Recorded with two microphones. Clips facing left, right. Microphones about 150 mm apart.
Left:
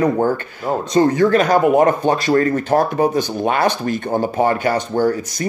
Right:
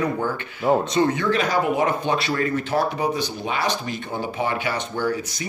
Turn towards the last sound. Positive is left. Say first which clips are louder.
# left 8 dB
turn(degrees=45)  # may be behind; listen again after turning